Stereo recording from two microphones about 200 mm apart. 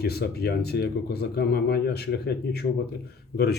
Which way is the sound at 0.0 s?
50° left (ahead or behind).